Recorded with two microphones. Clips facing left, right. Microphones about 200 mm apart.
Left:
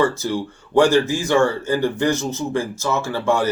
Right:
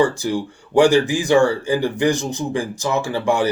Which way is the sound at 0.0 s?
15° right (ahead or behind).